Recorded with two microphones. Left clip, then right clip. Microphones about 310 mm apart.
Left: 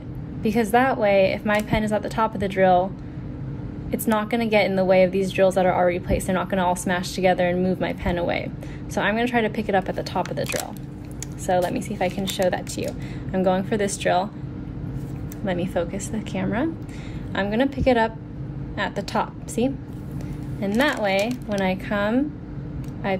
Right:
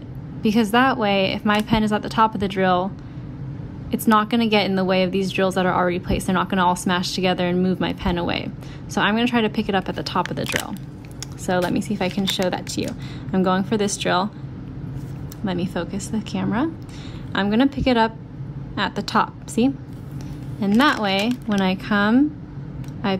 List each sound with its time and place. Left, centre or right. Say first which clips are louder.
0.4 s a woman's voice: right 1 dB; centre
3.9 s a woman's voice: right 5 dB; centre
15.4 s a woman's voice: left 2 dB; centre
17.3 s a woman's voice: right 2 dB; centre